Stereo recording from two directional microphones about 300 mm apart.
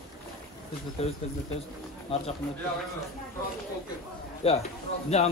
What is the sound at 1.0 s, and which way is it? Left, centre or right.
Speech, centre.